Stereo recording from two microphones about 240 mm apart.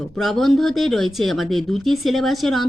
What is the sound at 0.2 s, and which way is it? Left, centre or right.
Speech, centre.